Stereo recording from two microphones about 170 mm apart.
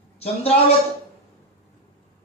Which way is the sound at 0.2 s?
35° left (ahead or behind).